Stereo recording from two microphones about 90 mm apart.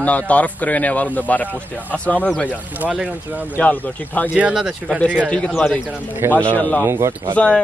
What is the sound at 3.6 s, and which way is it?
Speech, 20° left (ahead or behind).